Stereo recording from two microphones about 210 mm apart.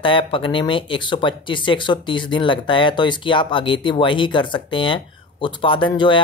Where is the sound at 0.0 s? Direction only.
25° left (ahead or behind).